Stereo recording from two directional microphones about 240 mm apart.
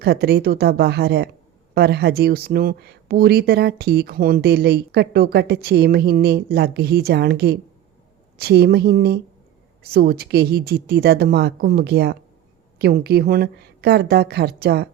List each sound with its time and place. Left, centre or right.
0.0 s speech: right